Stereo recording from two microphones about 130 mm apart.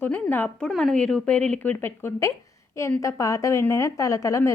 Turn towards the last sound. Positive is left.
turn(degrees=25)  # may be behind; listen again after turning